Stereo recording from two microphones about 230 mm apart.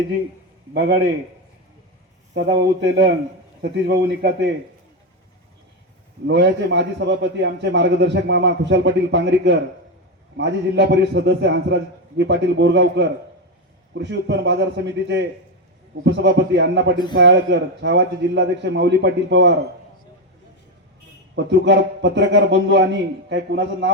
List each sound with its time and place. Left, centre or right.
2.3 s a man's voice: right
6.2 s a man's voice: right
21.3 s a man's voice: right